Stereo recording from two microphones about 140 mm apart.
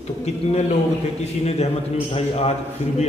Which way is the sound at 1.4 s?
45° left (ahead or behind).